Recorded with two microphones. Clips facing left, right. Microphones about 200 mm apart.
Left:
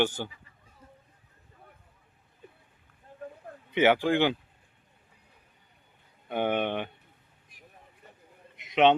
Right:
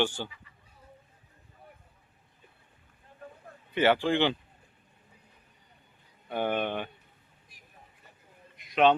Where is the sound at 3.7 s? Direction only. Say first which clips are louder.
Left 2 dB; 15° left (ahead or behind).